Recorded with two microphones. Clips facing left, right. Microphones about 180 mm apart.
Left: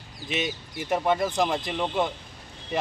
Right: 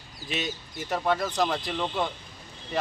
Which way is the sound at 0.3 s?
15° left (ahead or behind).